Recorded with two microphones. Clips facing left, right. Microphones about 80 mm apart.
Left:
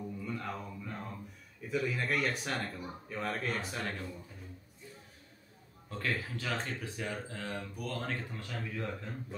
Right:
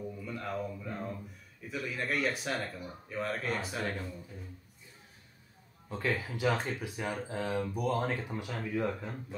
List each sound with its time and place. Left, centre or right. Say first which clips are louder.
0.2 s a sound: right 4 dB; centre
1.7 s speech: left 2 dB; centre
5.9 s speech: right 3 dB; centre